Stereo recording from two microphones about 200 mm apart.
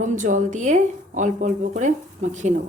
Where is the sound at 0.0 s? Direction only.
40° right (ahead or behind).